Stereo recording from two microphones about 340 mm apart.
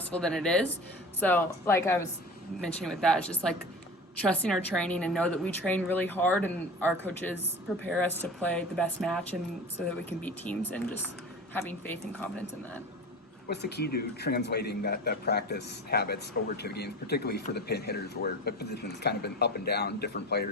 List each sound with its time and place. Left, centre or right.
0.1 s a woman's voice: centre
13.5 s speech: left